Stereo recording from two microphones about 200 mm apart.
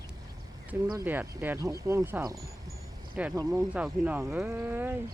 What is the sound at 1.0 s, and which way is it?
Speech, 10° right (ahead or behind).